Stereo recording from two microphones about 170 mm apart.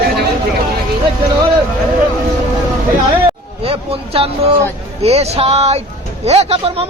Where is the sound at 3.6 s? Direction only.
35° right (ahead or behind).